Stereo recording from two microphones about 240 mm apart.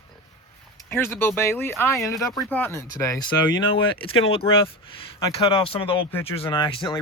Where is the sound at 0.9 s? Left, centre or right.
Centre.